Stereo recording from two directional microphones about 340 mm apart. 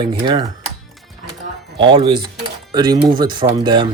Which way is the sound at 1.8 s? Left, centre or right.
Centre.